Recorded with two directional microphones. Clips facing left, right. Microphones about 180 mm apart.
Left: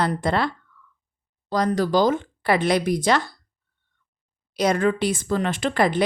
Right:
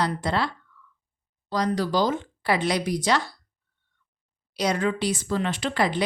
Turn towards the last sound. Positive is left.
turn(degrees=50)  # may be behind; listen again after turning